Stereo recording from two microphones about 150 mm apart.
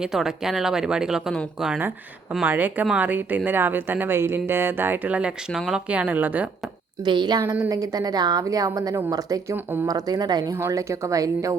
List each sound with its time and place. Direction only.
0.0 s speech: centre (ahead or behind)
7.0 s a woman's voice: 30° right (ahead or behind)
9.6 s speech: 15° right (ahead or behind)
9.8 s a woman's voice: 25° right (ahead or behind)